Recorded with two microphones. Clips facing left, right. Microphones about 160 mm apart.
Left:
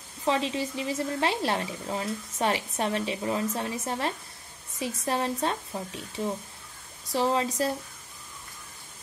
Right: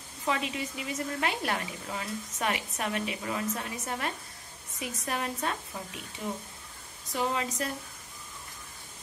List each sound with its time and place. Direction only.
0.2 s a woman's voice: 30° left (ahead or behind)